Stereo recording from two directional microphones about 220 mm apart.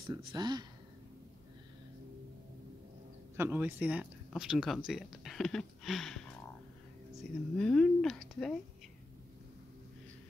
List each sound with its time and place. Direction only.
0.3 s speech: 20° right (ahead or behind)
3.3 s speech: 10° right (ahead or behind)